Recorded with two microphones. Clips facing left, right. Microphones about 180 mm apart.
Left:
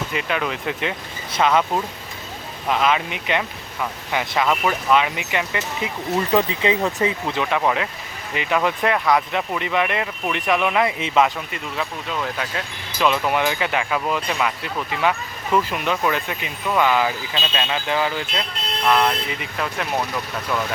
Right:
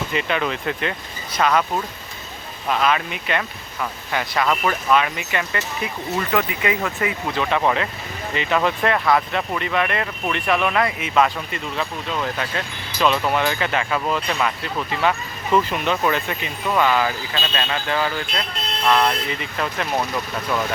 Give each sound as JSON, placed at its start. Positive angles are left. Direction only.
{"t": 0.1, "sound": "speech", "side_deg": 5}
{"t": 7.5, "sound": "speech", "side_deg": 5}
{"t": 11.5, "sound": "speech", "side_deg": 5}